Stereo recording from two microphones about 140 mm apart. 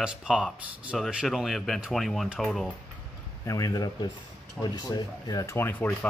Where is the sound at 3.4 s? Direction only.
25° left (ahead or behind).